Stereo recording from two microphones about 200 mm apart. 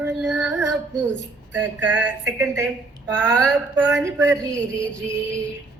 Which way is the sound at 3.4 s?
5° left (ahead or behind).